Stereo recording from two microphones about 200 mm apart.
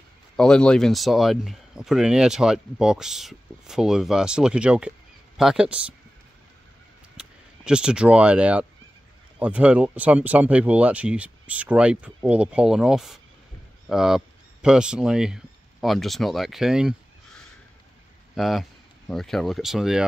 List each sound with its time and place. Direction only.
0.4 s speech: 5° left (ahead or behind)
7.2 s speech: 5° right (ahead or behind)
18.3 s speech: centre (ahead or behind)